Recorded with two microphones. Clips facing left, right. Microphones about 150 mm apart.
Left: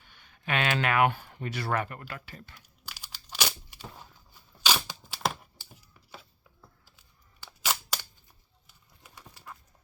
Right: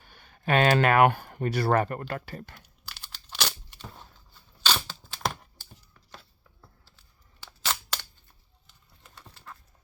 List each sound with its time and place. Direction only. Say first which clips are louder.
0.0 s speech: right 7 dB; 45° right (ahead or behind)
2.8 s tearing: left 1 dB; 10° left (ahead or behind)
7.4 s camera: even; 10° left (ahead or behind)
8.6 s horse: even; 10° left (ahead or behind)